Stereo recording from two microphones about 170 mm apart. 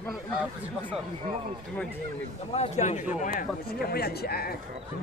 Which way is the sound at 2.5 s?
40° left (ahead or behind).